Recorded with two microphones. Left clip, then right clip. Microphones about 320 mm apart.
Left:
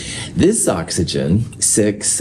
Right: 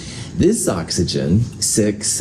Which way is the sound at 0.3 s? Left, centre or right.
Left.